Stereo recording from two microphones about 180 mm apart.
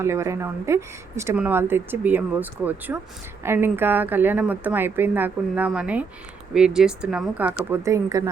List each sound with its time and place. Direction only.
0.0 s speech: 15° right (ahead or behind)